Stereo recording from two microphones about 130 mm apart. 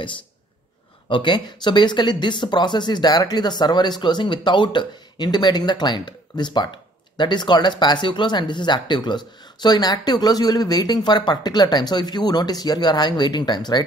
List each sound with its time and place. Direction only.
1.0 s speech: 35° left (ahead or behind)